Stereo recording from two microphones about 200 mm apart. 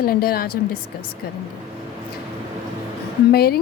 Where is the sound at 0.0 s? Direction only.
50° left (ahead or behind).